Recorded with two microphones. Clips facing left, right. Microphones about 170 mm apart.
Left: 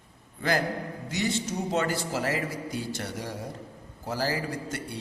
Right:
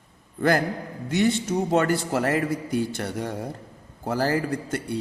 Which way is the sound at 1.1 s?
60° right (ahead or behind).